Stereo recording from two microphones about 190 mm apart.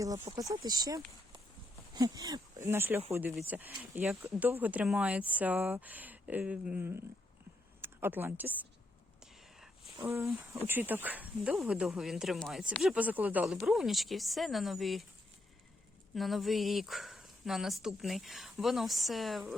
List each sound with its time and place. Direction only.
0.3 s speech: 20° right (ahead or behind)
10.5 s speech: 10° right (ahead or behind)
16.1 s speech: centre (ahead or behind)